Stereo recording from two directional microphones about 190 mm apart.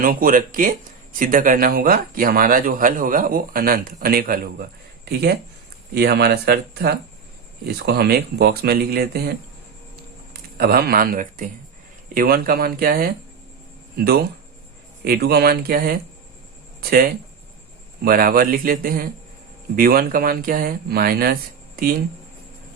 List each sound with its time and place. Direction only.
0.0 s speech: 45° right (ahead or behind)
10.6 s speech: 55° right (ahead or behind)